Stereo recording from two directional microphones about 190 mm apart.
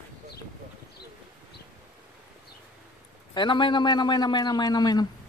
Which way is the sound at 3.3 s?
25° left (ahead or behind).